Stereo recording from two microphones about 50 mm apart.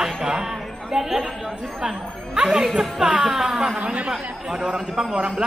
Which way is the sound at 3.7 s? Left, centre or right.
Right.